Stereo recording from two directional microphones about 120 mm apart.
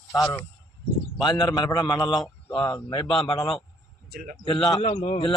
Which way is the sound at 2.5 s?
45° left (ahead or behind).